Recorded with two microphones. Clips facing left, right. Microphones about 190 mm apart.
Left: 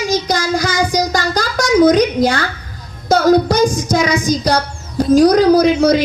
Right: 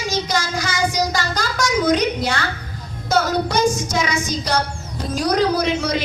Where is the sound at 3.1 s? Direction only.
35° left (ahead or behind).